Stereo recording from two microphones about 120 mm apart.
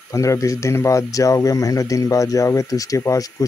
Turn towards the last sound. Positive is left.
turn(degrees=25)  # may be behind; listen again after turning